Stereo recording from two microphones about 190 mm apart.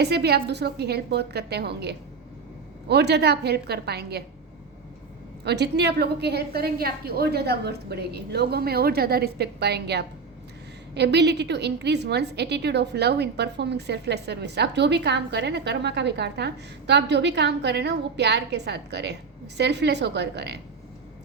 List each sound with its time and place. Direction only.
0.0 s a woman's voice: 60° right (ahead or behind)
5.5 s a woman's voice: 60° right (ahead or behind)